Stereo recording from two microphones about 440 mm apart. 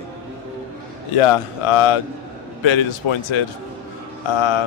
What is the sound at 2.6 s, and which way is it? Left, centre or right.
A man's voice, left.